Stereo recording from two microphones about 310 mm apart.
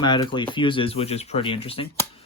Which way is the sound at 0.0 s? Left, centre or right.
Centre.